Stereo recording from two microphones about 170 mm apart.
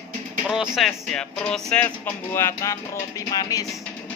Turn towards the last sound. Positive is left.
turn(degrees=20)  # may be behind; listen again after turning